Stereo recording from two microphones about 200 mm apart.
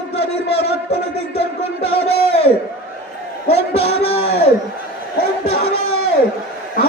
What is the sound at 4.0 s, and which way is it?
Speech, 30° left (ahead or behind).